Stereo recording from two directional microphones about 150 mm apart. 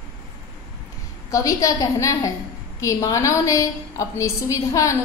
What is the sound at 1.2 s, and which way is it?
A woman's voice, 20° left (ahead or behind).